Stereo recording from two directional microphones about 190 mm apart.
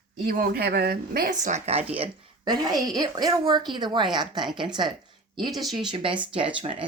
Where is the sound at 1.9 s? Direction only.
25° right (ahead or behind).